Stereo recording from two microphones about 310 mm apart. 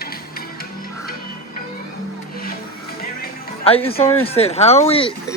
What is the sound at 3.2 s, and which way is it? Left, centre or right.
Music, centre.